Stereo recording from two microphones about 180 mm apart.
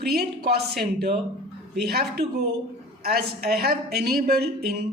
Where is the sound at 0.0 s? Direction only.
60° right (ahead or behind).